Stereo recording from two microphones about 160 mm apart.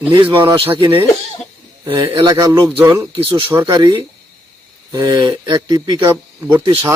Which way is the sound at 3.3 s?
30° right (ahead or behind).